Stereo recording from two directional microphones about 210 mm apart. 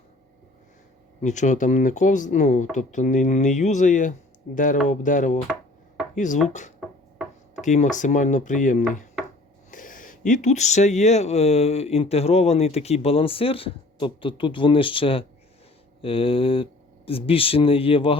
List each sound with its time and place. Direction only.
1.2 s speech: 35° left (ahead or behind)